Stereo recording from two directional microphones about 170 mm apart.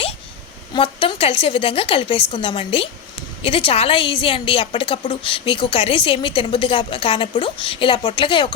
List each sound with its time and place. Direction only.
0.7 s a woman's voice: 30° left (ahead or behind)